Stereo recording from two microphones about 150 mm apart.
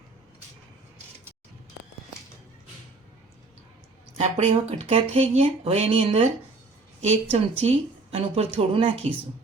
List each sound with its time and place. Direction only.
4.2 s a woman's voice: 45° right (ahead or behind)